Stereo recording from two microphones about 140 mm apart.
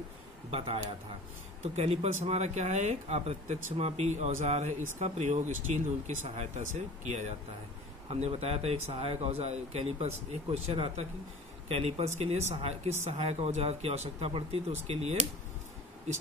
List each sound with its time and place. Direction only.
0.5 s speech: 40° right (ahead or behind); by 7.3 s 55° right (ahead or behind)
8.1 s speech: 45° right (ahead or behind)